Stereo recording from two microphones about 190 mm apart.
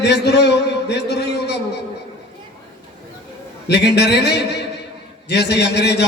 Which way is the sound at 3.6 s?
60° left (ahead or behind).